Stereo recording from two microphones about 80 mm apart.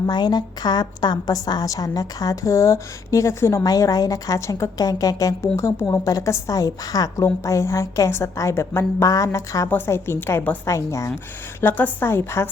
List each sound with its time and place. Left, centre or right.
0.1 s a woman's voice: left
3.6 s a woman's voice: left
4.4 s a woman's voice: left
4.8 s a woman's voice: left
7.4 s a woman's voice: left
9.6 s a woman's voice: left
11.6 s a woman's voice: left